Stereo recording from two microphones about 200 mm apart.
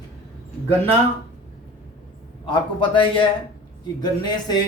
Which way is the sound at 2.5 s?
25° left (ahead or behind).